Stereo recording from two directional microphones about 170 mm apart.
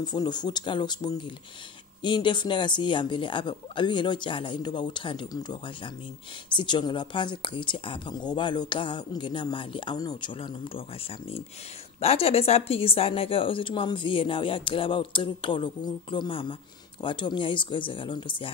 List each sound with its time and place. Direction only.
0.0 s a woman's voice: 25° left (ahead or behind)